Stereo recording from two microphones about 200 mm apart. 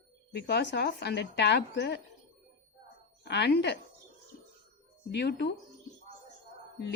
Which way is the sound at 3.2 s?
55° left (ahead or behind).